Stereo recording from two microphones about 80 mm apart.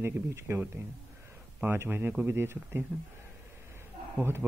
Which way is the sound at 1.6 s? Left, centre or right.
Right.